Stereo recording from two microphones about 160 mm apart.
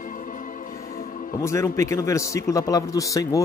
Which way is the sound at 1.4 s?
20° left (ahead or behind).